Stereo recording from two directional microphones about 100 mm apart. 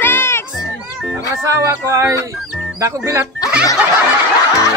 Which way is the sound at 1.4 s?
30° right (ahead or behind).